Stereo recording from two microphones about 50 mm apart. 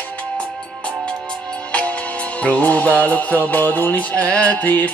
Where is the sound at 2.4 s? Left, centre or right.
Left.